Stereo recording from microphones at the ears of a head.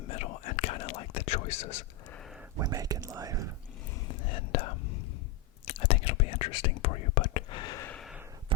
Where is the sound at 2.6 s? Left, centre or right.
Right.